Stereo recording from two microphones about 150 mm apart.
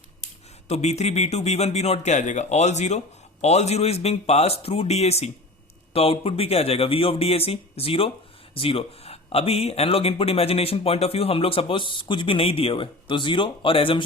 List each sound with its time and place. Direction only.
0.7 s speech: 45° left (ahead or behind)